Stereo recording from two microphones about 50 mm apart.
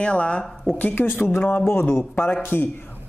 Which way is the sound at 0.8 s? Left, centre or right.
Left.